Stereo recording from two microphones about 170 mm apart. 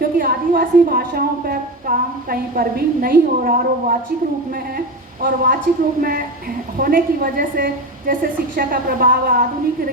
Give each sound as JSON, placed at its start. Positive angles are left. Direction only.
{"t": 0.2, "sound": "a woman's voice", "side_deg": -60}
{"t": 5.2, "sound": "a woman's voice", "side_deg": -60}